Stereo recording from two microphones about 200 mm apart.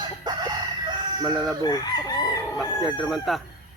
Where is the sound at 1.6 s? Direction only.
20° left (ahead or behind).